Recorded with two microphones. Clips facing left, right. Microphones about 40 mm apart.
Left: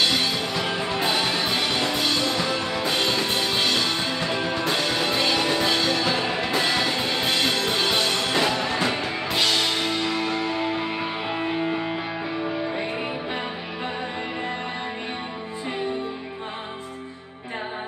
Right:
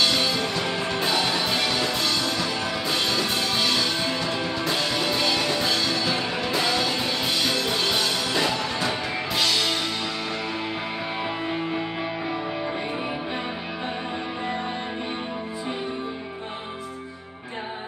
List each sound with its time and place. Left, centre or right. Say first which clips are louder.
0.0 s music: even; centre